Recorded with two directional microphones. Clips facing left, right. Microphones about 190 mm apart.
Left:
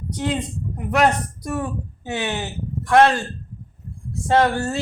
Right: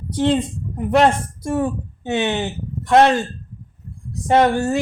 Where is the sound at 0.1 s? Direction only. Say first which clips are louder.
Right 7 dB; 30° right (ahead or behind).